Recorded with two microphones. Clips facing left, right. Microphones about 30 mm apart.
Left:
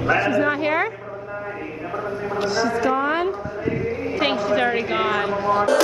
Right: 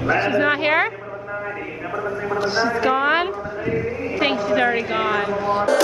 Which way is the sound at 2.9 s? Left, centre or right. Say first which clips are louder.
Right 2 dB; right.